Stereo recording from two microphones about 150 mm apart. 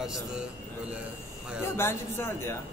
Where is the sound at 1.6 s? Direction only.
15° left (ahead or behind).